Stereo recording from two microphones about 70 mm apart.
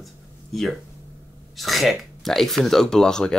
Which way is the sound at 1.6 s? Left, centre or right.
Centre.